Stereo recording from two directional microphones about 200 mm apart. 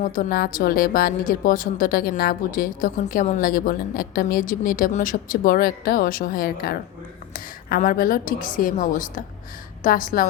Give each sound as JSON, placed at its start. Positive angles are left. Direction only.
{"t": 0.0, "sound": "speech", "side_deg": 45}